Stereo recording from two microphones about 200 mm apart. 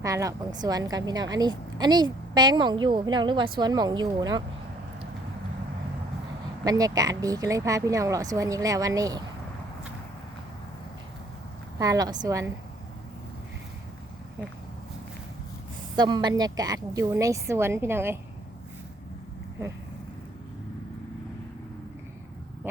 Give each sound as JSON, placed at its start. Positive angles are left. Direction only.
{"t": 0.0, "sound": "a woman's voice", "side_deg": -15}
{"t": 6.7, "sound": "speech", "side_deg": -20}
{"t": 11.8, "sound": "speech", "side_deg": -20}
{"t": 16.0, "sound": "speech", "side_deg": -20}
{"t": 19.6, "sound": "speech", "side_deg": -15}